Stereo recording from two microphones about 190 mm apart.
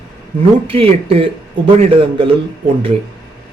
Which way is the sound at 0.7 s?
30° right (ahead or behind).